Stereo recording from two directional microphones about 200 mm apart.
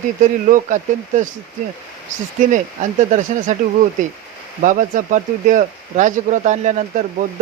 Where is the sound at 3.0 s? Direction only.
40° right (ahead or behind).